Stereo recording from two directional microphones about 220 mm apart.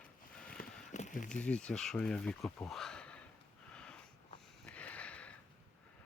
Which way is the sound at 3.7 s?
5° left (ahead or behind).